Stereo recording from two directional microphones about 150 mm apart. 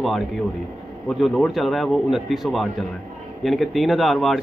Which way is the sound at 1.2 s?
Centre (ahead or behind).